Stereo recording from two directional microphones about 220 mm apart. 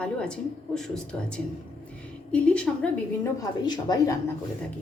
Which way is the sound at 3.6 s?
20° left (ahead or behind).